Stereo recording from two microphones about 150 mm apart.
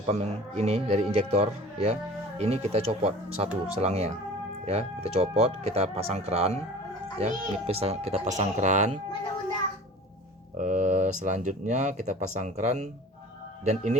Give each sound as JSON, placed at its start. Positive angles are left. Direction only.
{"t": 0.0, "sound": "speech", "side_deg": -45}
{"t": 10.6, "sound": "speech", "side_deg": -55}